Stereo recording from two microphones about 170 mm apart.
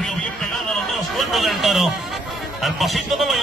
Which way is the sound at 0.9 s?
Centre (ahead or behind).